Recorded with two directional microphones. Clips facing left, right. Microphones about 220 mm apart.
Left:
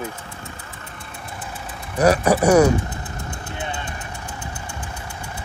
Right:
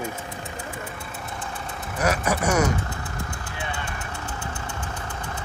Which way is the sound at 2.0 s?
35° left (ahead or behind).